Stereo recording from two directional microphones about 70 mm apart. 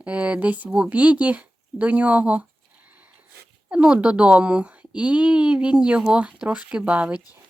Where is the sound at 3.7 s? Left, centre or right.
Centre.